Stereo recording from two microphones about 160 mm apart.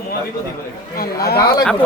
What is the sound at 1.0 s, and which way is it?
Speech, 75° left (ahead or behind).